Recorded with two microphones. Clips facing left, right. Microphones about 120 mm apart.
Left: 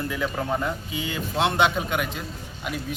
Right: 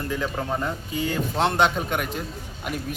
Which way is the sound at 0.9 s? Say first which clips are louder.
Right 5 dB; 45° right (ahead or behind).